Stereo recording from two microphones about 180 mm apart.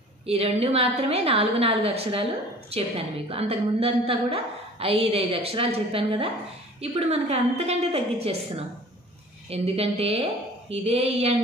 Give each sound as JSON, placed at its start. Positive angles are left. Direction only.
{"t": 0.3, "sound": "a woman's voice", "side_deg": -35}